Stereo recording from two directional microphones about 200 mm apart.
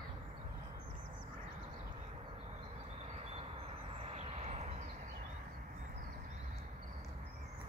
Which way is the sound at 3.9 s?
30° right (ahead or behind).